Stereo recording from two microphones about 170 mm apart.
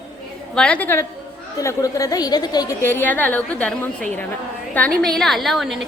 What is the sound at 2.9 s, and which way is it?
A woman's voice, 10° left (ahead or behind).